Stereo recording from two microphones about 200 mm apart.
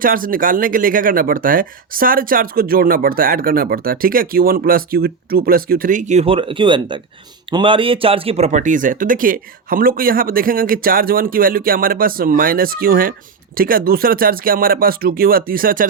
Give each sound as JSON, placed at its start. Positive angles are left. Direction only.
{"t": 0.0, "sound": "speech", "side_deg": -45}